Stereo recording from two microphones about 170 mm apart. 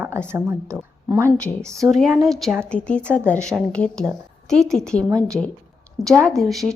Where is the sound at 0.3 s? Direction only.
15° right (ahead or behind).